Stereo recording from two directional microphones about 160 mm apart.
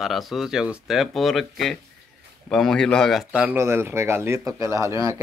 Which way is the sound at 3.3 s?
15° right (ahead or behind).